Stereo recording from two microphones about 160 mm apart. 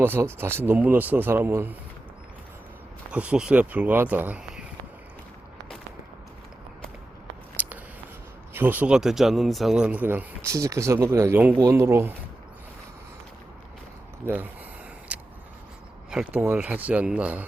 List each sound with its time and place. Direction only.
0.0 s a man's voice: 15° right (ahead or behind)
3.1 s a man's voice: 5° right (ahead or behind)
7.6 s a sound: 10° right (ahead or behind)
8.5 s a man's voice: 10° right (ahead or behind)
14.3 s a man's voice: 10° right (ahead or behind)
15.1 s vehicle: 10° right (ahead or behind)
16.0 s a man's voice: 5° right (ahead or behind)